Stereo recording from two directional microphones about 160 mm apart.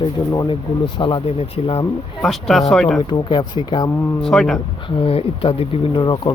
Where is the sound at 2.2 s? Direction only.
Centre (ahead or behind).